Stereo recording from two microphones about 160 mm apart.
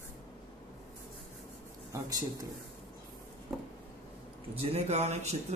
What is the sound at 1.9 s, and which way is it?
Speech, 20° right (ahead or behind).